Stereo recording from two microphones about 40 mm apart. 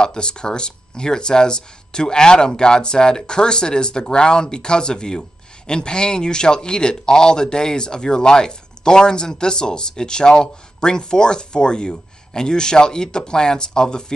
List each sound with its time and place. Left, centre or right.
0.0 s speech: left